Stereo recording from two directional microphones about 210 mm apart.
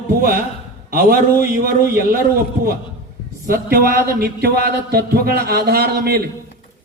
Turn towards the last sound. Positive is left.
turn(degrees=-50)  # may be behind; listen again after turning